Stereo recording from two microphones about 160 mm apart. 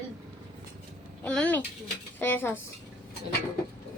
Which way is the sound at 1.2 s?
5° left (ahead or behind).